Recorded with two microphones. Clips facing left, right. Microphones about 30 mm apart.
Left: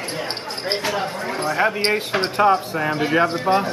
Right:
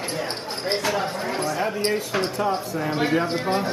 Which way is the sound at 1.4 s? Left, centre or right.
Left.